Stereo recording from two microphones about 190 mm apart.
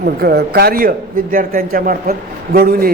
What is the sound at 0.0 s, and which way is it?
Speech, 55° right (ahead or behind).